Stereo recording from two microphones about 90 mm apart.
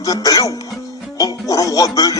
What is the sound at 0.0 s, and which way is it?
A man's voice, 45° left (ahead or behind).